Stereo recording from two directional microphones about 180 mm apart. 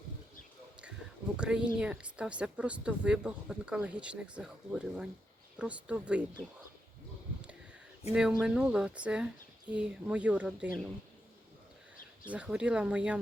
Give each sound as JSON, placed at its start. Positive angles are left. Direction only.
{"t": 1.4, "sound": "speech", "side_deg": -5}
{"t": 8.1, "sound": "speech", "side_deg": -5}
{"t": 12.3, "sound": "speech", "side_deg": -5}